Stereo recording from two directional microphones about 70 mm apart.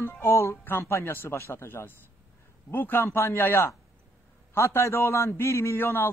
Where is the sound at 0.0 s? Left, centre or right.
Left.